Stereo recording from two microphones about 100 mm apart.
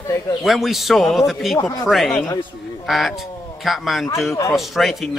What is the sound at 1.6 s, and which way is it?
Speech, 30° left (ahead or behind).